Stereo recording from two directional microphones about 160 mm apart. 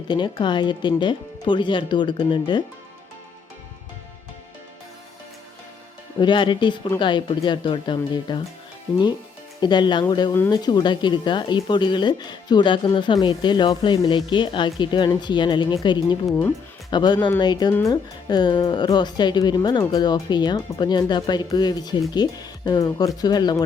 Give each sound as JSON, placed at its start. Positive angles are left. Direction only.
{"t": 0.1, "sound": "speech", "side_deg": 30}
{"t": 6.1, "sound": "speech", "side_deg": 30}
{"t": 9.6, "sound": "speech", "side_deg": 30}